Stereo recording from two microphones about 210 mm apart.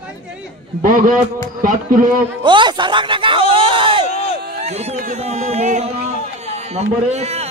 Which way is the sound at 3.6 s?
25° right (ahead or behind).